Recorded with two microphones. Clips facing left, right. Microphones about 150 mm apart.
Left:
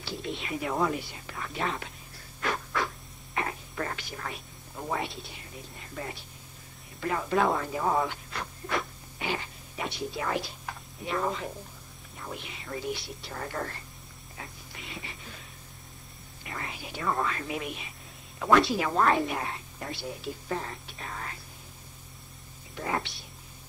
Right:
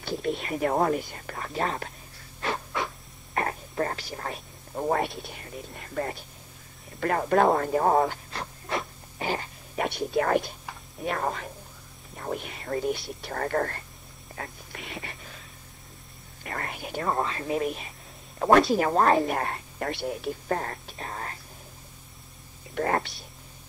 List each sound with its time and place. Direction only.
0.4 s speech: 50° right (ahead or behind)
2.4 s music: 25° right (ahead or behind)
3.3 s a sound: 40° right (ahead or behind)
6.0 s a woman's voice: 55° right (ahead or behind); by 8.8 s 30° right (ahead or behind)
9.2 s a sound: 40° right (ahead or behind)
9.8 s a woman's voice: 55° right (ahead or behind)
14.3 s a sound: 60° right (ahead or behind)
16.4 s speech: 55° right (ahead or behind)
17.1 s speech: 30° right (ahead or behind)
19.2 s a woman's voice: 55° right (ahead or behind); by 21.4 s 40° right (ahead or behind)
22.8 s speech: 55° right (ahead or behind)